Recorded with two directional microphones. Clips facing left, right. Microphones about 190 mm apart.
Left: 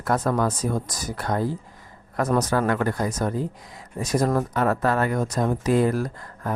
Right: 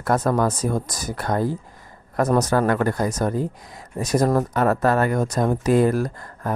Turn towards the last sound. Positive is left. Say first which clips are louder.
# right 2 dB
turn(degrees=-45)  # may be behind; listen again after turning